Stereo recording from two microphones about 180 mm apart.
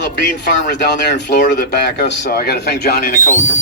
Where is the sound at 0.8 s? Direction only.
70° left (ahead or behind).